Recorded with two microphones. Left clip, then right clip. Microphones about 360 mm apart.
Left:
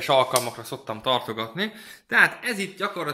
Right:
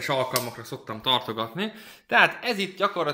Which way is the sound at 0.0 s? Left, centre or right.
Centre.